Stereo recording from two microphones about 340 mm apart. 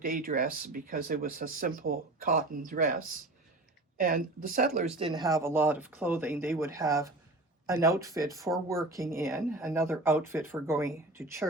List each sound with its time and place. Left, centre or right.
0.0 s speech: right
8.5 s speech: centre